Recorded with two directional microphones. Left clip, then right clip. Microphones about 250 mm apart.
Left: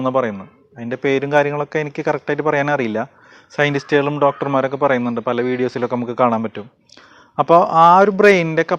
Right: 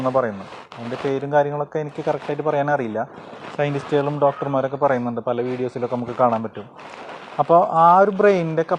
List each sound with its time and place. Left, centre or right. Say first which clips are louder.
0.0 s a man's voice: left 2 dB; left
3.6 s a man's voice: left 5 dB; left
4.8 s a man's voice: left 3 dB; left